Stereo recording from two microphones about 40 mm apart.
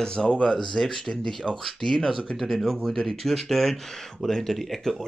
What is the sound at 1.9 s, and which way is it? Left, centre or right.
Speech, centre.